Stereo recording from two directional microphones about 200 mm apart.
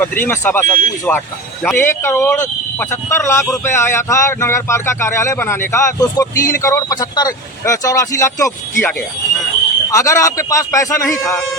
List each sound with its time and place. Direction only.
0.0 s speech: 10° left (ahead or behind)